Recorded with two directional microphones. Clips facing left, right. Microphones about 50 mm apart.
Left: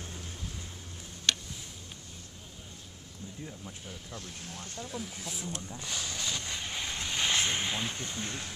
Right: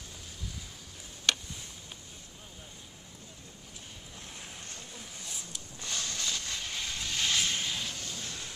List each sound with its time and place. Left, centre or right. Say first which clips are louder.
4.4 s speech: left 2 dB; centre
4.9 s speech: left 7 dB; centre
5.8 s vehicle: right 4 dB; centre; by 8.5 s left